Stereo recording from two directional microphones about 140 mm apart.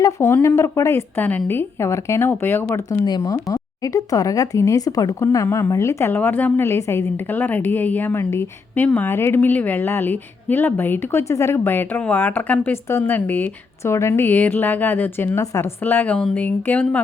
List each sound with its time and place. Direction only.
0.0 s speech: 15° left (ahead or behind)